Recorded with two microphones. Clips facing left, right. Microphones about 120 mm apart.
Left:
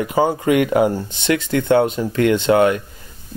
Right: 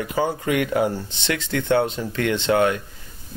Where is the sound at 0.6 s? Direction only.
55° left (ahead or behind).